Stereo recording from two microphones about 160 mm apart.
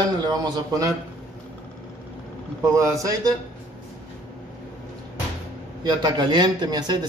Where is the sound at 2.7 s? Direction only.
20° right (ahead or behind).